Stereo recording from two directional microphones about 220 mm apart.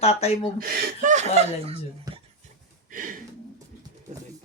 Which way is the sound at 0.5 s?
40° right (ahead or behind).